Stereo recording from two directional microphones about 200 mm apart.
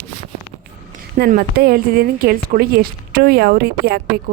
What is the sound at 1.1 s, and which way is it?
A woman's voice, 50° right (ahead or behind).